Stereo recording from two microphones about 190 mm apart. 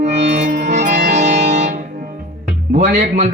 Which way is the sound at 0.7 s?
40° right (ahead or behind).